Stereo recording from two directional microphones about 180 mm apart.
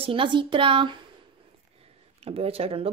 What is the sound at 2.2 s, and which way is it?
Speech, 35° right (ahead or behind).